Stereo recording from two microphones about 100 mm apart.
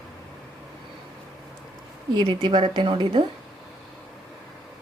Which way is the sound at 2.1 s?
50° right (ahead or behind).